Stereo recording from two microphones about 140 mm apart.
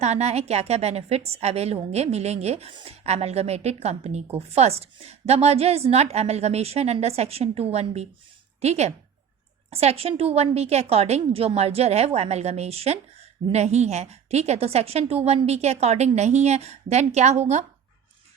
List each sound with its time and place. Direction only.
0.0 s a woman's voice: 50° right (ahead or behind)